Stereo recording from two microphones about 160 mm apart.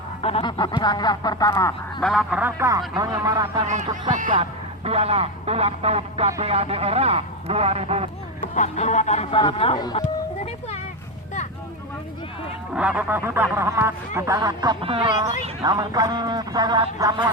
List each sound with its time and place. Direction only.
0.2 s speech: 40° left (ahead or behind); by 1.7 s 20° left (ahead or behind)
2.0 s speech: centre (ahead or behind)
2.4 s speech: 20° right (ahead or behind)
4.1 s speech: 55° right (ahead or behind)
4.9 s speech: 40° right (ahead or behind)
8.4 s speech: 50° left (ahead or behind); by 10.0 s 30° left (ahead or behind)
12.7 s speech: 5° right (ahead or behind); by 17.2 s 25° right (ahead or behind)